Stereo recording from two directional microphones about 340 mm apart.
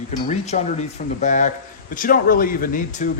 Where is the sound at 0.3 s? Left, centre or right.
Centre.